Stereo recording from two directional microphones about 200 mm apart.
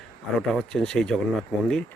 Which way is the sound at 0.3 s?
Centre (ahead or behind).